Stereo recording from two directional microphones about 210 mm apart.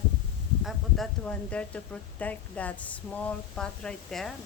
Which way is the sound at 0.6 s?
5° left (ahead or behind).